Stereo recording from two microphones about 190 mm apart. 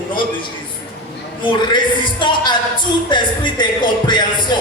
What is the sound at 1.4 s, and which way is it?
Speech, 25° left (ahead or behind).